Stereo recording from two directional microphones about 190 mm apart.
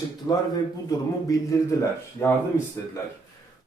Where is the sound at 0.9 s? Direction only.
15° left (ahead or behind).